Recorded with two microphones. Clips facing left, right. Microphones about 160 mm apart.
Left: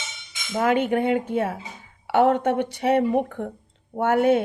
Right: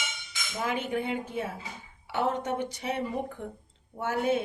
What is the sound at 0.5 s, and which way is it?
Speech, 65° left (ahead or behind).